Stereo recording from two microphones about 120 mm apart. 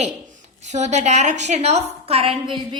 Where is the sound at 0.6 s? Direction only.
75° right (ahead or behind); by 2.6 s 55° right (ahead or behind).